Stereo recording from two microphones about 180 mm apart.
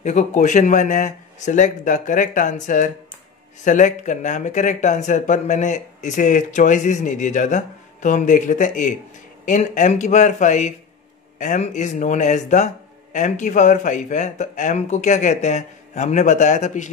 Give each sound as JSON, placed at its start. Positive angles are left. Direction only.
{"t": 0.0, "sound": "speech", "side_deg": 40}